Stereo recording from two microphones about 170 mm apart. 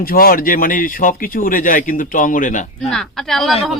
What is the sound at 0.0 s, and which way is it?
Speech, 60° left (ahead or behind).